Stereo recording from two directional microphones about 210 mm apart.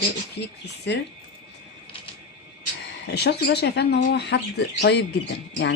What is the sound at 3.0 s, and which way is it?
Speech, 50° left (ahead or behind).